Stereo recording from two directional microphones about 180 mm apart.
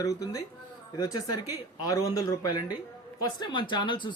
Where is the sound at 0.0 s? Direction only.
20° left (ahead or behind).